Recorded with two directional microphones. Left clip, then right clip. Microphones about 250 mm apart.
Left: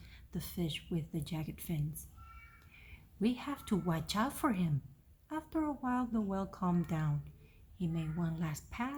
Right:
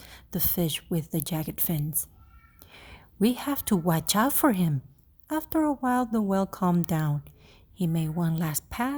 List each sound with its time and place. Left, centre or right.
0.0 s a woman's voice: right